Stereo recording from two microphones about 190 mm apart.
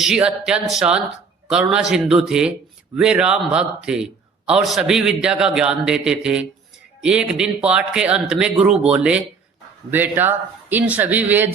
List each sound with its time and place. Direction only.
0.0 s a man's voice: 5° right (ahead or behind)